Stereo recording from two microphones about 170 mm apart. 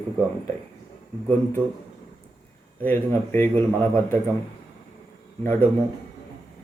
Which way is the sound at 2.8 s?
10° left (ahead or behind).